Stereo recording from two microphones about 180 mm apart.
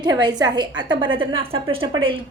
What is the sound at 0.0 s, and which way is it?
A woman's voice, 25° right (ahead or behind).